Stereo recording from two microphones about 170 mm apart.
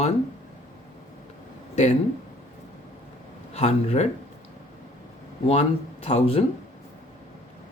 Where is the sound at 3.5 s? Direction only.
40° left (ahead or behind).